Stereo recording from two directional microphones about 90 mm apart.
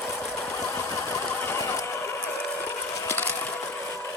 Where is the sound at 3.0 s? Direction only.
25° left (ahead or behind).